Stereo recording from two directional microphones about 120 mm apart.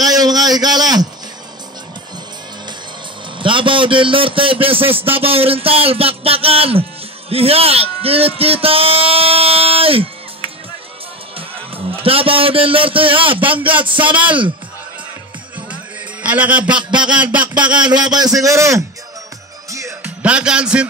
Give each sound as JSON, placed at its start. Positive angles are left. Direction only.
{"t": 0.0, "sound": "a sound", "side_deg": -30}
{"t": 3.3, "sound": "a man's voice", "side_deg": -45}
{"t": 11.3, "sound": "a man's voice", "side_deg": -50}
{"t": 15.7, "sound": "music", "side_deg": -10}
{"t": 16.7, "sound": "a man's voice", "side_deg": -40}
{"t": 17.2, "sound": "speech", "side_deg": -10}
{"t": 17.9, "sound": "a man's voice", "side_deg": -35}
{"t": 20.0, "sound": "music", "side_deg": -10}